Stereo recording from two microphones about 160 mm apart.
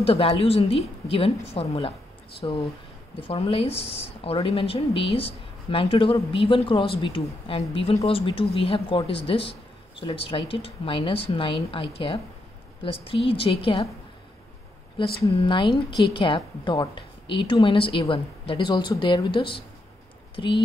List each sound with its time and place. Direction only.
0.0 s a woman's voice: 35° left (ahead or behind)
15.0 s a woman's voice: 30° left (ahead or behind)